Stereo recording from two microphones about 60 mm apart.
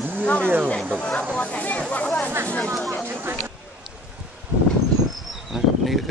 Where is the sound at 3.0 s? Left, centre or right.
Right.